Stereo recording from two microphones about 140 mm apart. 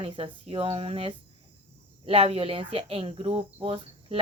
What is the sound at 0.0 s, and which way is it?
Speech, 40° right (ahead or behind).